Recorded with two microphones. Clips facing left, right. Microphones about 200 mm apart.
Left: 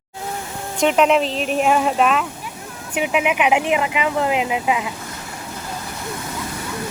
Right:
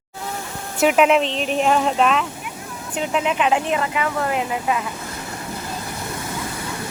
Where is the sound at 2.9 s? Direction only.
15° left (ahead or behind).